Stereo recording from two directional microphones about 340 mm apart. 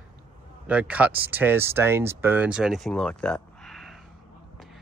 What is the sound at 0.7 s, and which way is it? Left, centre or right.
Speech, centre.